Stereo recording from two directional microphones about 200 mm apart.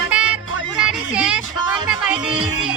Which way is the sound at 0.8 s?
5° right (ahead or behind).